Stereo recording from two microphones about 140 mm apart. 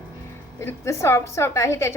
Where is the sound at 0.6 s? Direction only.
20° left (ahead or behind).